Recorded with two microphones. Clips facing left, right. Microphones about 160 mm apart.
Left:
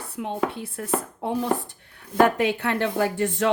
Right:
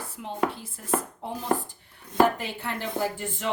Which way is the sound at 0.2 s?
90° left.